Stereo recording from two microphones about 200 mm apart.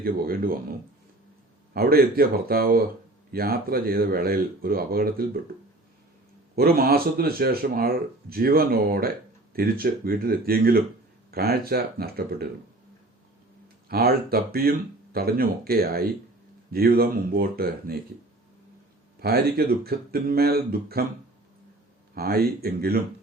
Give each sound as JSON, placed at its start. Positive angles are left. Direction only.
{"t": 0.0, "sound": "speech", "side_deg": -50}
{"t": 1.7, "sound": "speech", "side_deg": -50}
{"t": 6.6, "sound": "speech", "side_deg": -50}
{"t": 13.8, "sound": "speech", "side_deg": -50}
{"t": 19.2, "sound": "speech", "side_deg": -50}
{"t": 22.1, "sound": "speech", "side_deg": -50}